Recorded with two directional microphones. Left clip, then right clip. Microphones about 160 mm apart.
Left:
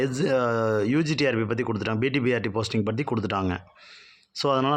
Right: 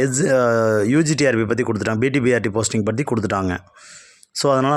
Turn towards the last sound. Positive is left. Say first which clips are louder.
# right 6 dB
turn(degrees=-30)  # may be behind; listen again after turning